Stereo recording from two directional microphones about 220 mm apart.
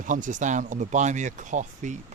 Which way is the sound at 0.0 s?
35° right (ahead or behind).